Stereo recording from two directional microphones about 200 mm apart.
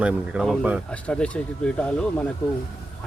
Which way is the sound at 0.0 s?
5° right (ahead or behind).